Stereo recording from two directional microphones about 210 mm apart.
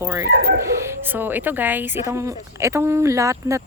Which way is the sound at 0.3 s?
50° right (ahead or behind).